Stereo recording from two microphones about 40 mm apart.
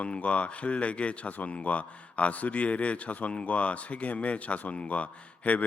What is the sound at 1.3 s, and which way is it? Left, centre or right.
A man's voice, left.